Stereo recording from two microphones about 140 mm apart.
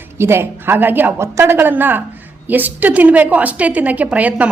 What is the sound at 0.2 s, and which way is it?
A woman's voice, 15° right (ahead or behind).